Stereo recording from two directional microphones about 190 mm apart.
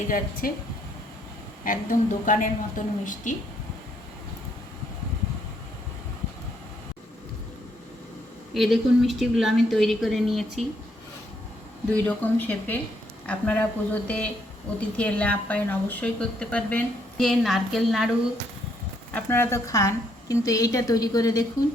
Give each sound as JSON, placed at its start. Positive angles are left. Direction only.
{"t": 0.4, "sound": "a woman's voice", "side_deg": 50}
{"t": 1.6, "sound": "a woman's voice", "side_deg": 45}
{"t": 8.5, "sound": "a woman's voice", "side_deg": 0}
{"t": 11.9, "sound": "a woman's voice", "side_deg": 10}
{"t": 19.1, "sound": "a woman's voice", "side_deg": 10}